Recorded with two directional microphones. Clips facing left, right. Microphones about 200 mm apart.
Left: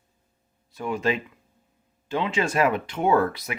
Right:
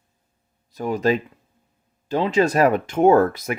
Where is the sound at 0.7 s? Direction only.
40° right (ahead or behind).